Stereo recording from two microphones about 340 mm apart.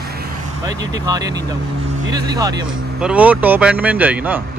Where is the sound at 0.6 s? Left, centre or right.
Centre.